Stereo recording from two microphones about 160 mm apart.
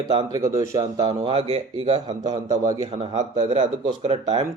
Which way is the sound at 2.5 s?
20° right (ahead or behind).